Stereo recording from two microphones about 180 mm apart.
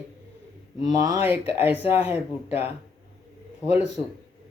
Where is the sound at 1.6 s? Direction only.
30° left (ahead or behind).